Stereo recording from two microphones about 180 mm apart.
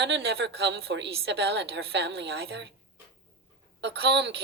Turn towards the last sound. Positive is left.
turn(degrees=-70)  # may be behind; listen again after turning